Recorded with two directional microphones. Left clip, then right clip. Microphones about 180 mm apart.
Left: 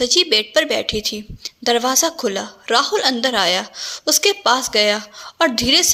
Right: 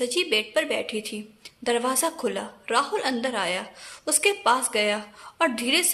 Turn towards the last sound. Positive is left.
turn(degrees=25)  # may be behind; listen again after turning